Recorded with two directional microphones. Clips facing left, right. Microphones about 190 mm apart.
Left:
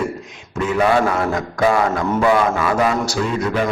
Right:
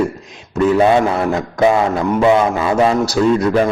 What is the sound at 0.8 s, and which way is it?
A man's voice, 25° right (ahead or behind).